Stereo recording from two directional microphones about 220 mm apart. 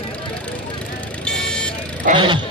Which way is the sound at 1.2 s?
5° left (ahead or behind).